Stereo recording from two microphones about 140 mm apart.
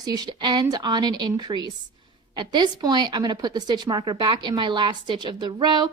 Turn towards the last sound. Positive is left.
turn(degrees=-30)  # may be behind; listen again after turning